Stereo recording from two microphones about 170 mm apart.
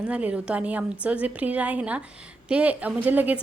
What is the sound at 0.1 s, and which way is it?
A woman's voice, 5° right (ahead or behind).